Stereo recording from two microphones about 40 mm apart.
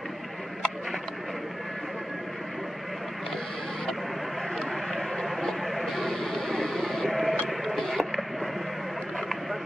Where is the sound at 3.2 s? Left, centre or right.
Centre.